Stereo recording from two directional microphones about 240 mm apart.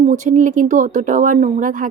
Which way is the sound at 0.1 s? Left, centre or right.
Right.